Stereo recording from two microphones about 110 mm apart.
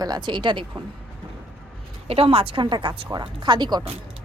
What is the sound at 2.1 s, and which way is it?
A woman's voice, 60° right (ahead or behind).